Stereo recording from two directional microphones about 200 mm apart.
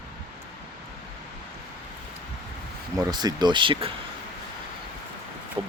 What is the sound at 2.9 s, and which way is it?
Speech, 20° right (ahead or behind).